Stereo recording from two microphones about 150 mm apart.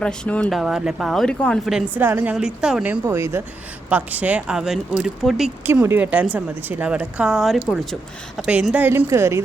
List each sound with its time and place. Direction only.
0.0 s speech: 10° left (ahead or behind)
2.0 s a woman's voice: 15° right (ahead or behind)
5.6 s a woman's voice: 15° right (ahead or behind)